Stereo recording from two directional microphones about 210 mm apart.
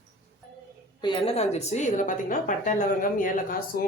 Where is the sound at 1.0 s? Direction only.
25° left (ahead or behind).